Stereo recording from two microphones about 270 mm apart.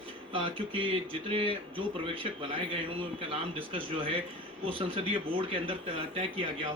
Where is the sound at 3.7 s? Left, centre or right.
Centre.